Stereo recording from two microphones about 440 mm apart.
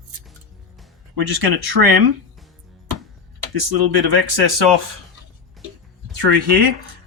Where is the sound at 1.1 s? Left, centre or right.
Right.